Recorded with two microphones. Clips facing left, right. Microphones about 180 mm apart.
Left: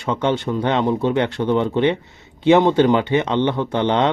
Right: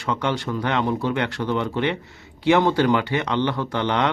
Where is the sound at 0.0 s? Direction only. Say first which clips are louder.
Left 4 dB; 20° left (ahead or behind).